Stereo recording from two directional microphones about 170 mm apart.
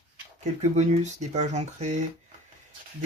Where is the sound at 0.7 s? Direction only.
40° right (ahead or behind).